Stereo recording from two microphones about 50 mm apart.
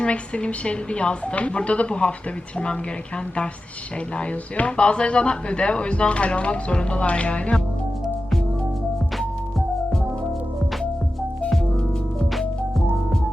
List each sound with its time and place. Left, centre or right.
0.0 s speech: left
4.5 s speech: left